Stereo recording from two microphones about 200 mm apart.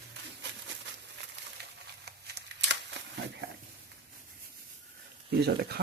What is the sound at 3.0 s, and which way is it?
Shuffling cards, 65° right (ahead or behind).